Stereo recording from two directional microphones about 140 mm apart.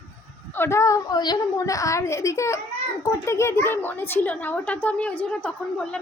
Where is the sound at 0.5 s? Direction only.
15° left (ahead or behind).